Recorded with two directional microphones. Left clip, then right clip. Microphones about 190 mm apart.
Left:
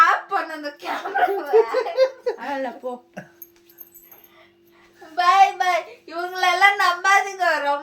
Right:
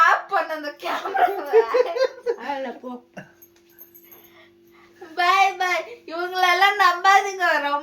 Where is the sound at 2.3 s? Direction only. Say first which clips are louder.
Left 1 dB; 35° left (ahead or behind).